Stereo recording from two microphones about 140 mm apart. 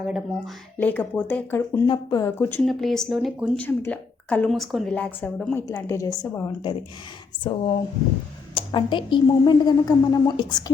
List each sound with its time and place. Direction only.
0.0 s speech: 5° right (ahead or behind)
0.8 s speech: 10° left (ahead or behind)
1.9 s a woman's voice: 25° left (ahead or behind)
2.6 s speech: centre (ahead or behind)
4.4 s speech: centre (ahead or behind)
5.6 s a woman's voice: 25° left (ahead or behind)
8.5 s a woman's voice: 35° left (ahead or behind)